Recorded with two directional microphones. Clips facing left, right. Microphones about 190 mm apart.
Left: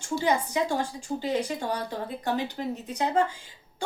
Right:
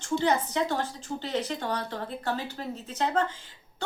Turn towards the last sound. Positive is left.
turn(degrees=15)  # may be behind; listen again after turning